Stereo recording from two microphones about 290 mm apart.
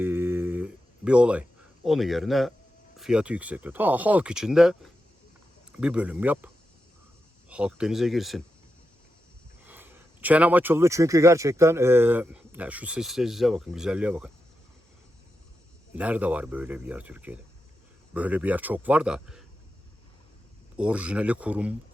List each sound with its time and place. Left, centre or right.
0.0 s a sound: centre
3.0 s speech: centre
7.5 s speech: centre
9.6 s speech: centre
16.0 s speech: centre
20.7 s speech: centre